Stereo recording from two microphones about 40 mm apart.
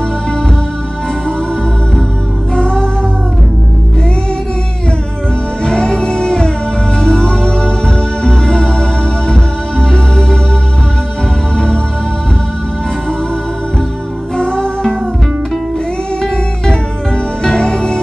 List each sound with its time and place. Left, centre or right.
2.5 s music: centre
5.6 s music: centre
11.5 s music: centre
14.3 s music: centre
17.4 s music: centre